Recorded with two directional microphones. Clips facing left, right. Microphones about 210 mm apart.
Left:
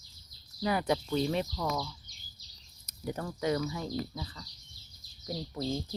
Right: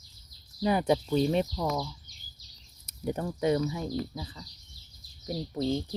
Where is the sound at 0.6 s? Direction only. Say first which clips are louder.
Right 4 dB; 25° right (ahead or behind).